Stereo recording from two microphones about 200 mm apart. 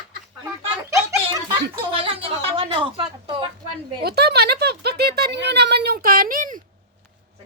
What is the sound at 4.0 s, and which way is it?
Speech, 55° right (ahead or behind).